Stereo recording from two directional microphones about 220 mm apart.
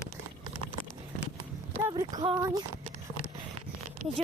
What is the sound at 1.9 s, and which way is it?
Speech, 20° right (ahead or behind).